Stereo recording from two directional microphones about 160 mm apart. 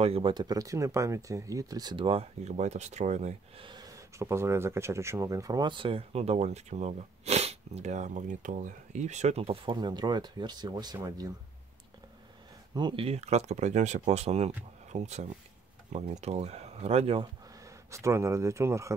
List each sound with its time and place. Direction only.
0.0 s speech: 35° right (ahead or behind)
3.6 s speech: 25° right (ahead or behind)
12.7 s speech: 30° right (ahead or behind)
17.6 s speech: 20° right (ahead or behind)